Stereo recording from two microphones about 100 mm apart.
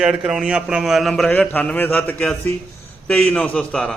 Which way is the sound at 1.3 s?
15° left (ahead or behind).